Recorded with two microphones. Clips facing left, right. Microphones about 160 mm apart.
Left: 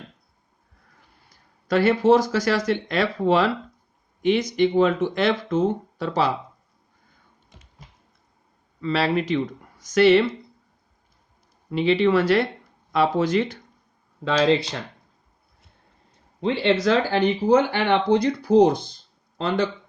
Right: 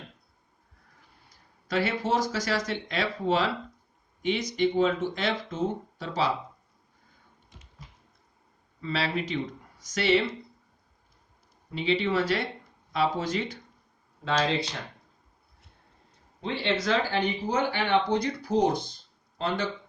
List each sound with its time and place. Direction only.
1.6 s speech: 65° left (ahead or behind)
8.8 s speech: 65° left (ahead or behind)
11.7 s speech: 65° left (ahead or behind)
16.4 s speech: 80° left